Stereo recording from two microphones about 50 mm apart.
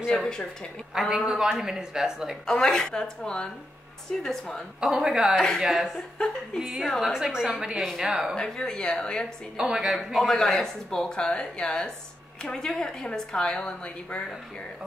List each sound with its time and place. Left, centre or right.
0.1 s speech: centre
0.9 s speech: centre
2.4 s speech: centre
4.7 s speech: centre
5.3 s speech: centre
5.6 s speech: centre
6.1 s speech: centre
7.1 s speech: centre
7.7 s speech: centre
8.0 s speech: centre
8.4 s speech: centre
9.6 s speech: centre
9.9 s speech: centre